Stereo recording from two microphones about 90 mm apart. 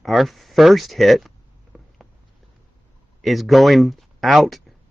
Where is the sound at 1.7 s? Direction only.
5° right (ahead or behind).